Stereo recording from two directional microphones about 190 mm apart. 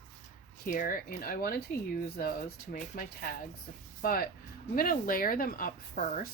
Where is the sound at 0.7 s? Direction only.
45° left (ahead or behind).